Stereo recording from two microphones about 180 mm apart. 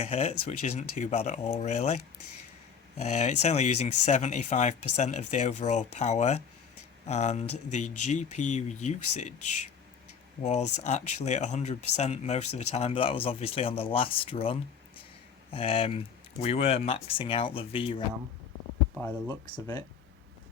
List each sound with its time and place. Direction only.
0.0 s speech: 35° left (ahead or behind)
3.0 s speech: 40° left (ahead or behind)
15.5 s speech: 30° left (ahead or behind)
19.0 s speech: 15° left (ahead or behind)